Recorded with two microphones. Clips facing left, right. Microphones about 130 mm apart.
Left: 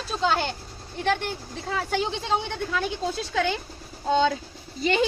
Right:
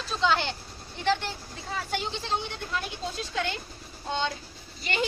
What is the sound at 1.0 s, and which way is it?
Speech, 55° left (ahead or behind).